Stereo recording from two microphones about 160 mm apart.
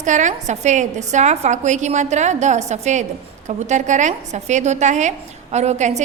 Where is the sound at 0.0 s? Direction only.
50° right (ahead or behind).